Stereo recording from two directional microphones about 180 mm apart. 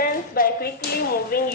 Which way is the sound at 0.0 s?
55° left (ahead or behind).